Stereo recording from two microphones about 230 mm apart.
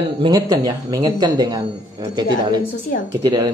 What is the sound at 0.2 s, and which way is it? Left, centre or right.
Speech, centre.